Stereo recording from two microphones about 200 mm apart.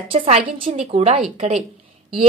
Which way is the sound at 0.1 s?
25° right (ahead or behind).